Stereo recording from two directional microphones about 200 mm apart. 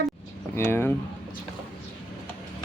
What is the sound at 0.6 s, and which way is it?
Speech, 10° left (ahead or behind).